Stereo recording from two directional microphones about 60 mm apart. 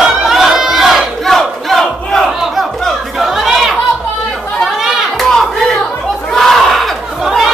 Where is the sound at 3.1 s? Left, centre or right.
Centre.